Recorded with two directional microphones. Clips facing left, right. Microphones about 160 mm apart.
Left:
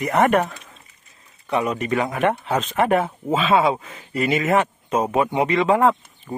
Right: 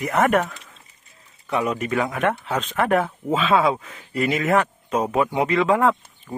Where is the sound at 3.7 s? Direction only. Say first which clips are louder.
Left 1 dB; 20° left (ahead or behind).